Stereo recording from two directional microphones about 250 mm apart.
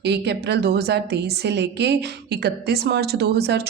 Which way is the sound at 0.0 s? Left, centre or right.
Right.